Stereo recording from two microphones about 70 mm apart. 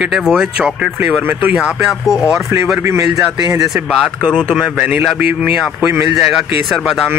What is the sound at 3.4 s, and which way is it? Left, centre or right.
Speech, right.